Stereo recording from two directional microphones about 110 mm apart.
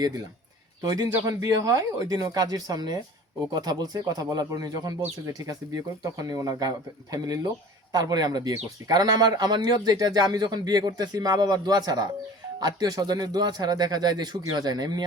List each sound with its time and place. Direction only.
0.8 s speech: 35° right (ahead or behind)